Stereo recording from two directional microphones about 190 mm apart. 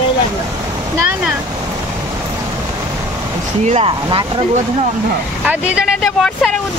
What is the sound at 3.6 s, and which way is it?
Speech, 35° right (ahead or behind).